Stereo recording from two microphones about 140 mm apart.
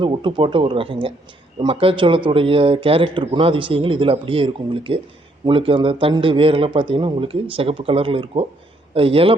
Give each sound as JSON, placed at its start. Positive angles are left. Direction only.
{"t": 0.0, "sound": "speech", "side_deg": -35}